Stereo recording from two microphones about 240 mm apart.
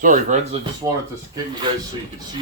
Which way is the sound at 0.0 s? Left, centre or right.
Right.